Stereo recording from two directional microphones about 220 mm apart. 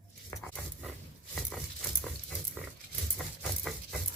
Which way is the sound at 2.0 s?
5° left (ahead or behind).